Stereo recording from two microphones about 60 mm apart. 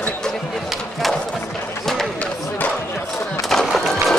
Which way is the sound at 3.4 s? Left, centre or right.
Centre.